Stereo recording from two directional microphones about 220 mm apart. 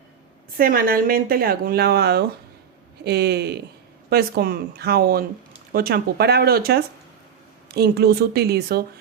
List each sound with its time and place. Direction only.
0.5 s a woman's voice: 40° right (ahead or behind)